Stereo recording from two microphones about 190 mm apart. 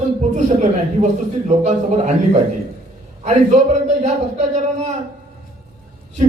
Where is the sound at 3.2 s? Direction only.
35° right (ahead or behind).